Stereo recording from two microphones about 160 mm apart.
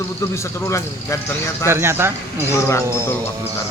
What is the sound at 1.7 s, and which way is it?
Speech, 15° right (ahead or behind).